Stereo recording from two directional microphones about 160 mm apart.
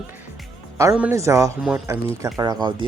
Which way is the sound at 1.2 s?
20° right (ahead or behind).